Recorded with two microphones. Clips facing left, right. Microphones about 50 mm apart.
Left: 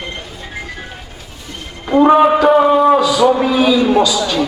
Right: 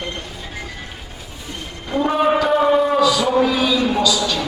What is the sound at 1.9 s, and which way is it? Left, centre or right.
Speech, left.